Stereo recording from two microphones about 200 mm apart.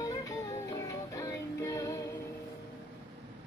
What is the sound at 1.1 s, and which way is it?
Music, 15° left (ahead or behind).